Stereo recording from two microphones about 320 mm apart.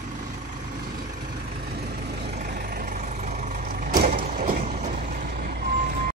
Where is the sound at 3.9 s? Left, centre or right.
Right.